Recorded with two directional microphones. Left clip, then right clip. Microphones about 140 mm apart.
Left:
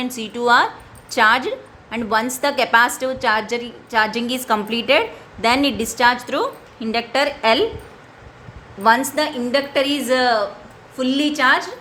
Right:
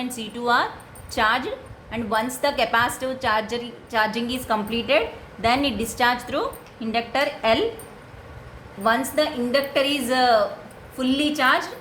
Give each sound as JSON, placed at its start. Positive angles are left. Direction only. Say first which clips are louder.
{"t": 0.0, "sound": "a woman's voice", "louder": "left 6 dB", "side_deg": 40}
{"t": 8.8, "sound": "a woman's voice", "louder": "left 5 dB", "side_deg": 45}